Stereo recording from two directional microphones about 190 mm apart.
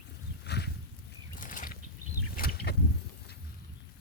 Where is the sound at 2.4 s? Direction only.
55° left (ahead or behind).